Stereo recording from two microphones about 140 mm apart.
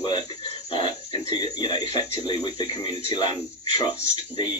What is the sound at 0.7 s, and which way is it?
Speech, 35° left (ahead or behind).